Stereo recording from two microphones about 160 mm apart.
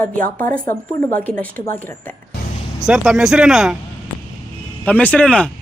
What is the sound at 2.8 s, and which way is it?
Speech, 5° right (ahead or behind).